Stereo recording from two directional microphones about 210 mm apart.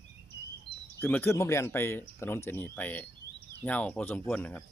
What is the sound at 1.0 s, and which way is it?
Speech, 10° left (ahead or behind).